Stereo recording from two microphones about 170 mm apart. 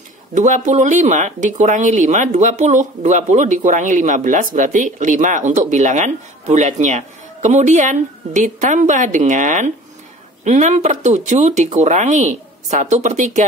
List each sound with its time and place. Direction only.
0.3 s speech: 45° right (ahead or behind)